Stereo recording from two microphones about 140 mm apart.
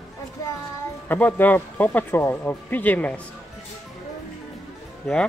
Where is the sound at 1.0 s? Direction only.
15° left (ahead or behind).